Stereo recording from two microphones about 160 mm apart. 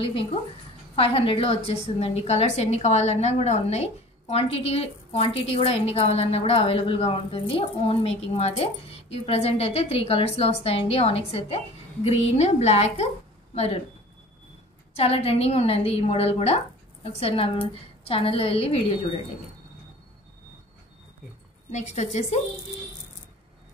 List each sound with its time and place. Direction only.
0.0 s a woman's voice: 35° left (ahead or behind)
15.0 s a woman's voice: 40° left (ahead or behind)
21.6 s a woman's voice: 45° left (ahead or behind)